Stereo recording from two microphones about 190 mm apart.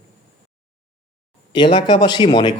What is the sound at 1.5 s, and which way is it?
Speech, 25° left (ahead or behind).